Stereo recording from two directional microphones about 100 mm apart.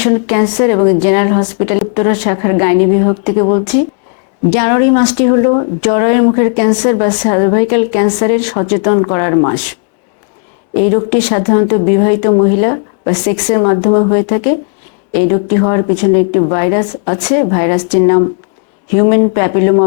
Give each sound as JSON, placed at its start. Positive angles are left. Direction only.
{"t": 0.0, "sound": "speech", "side_deg": 15}
{"t": 10.8, "sound": "speech", "side_deg": 20}